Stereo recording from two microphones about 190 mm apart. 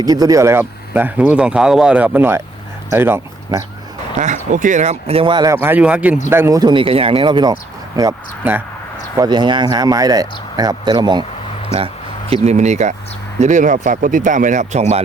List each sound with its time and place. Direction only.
0.0 s speech: 20° right (ahead or behind)
4.2 s speech: 40° right (ahead or behind); by 11.3 s 25° right (ahead or behind)
12.3 s speech: 35° right (ahead or behind)